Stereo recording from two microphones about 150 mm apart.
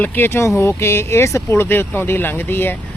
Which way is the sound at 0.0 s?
15° left (ahead or behind).